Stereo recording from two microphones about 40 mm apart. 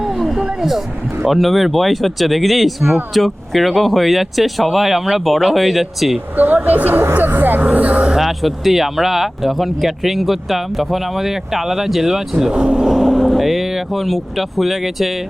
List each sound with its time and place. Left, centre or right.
0.0 s a sound: centre
1.2 s speech: centre
6.3 s speech: right
7.1 s vehicle: right
7.6 s a sound: right
8.2 s speech: centre